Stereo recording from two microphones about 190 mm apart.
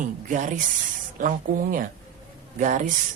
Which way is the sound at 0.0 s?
40° right (ahead or behind).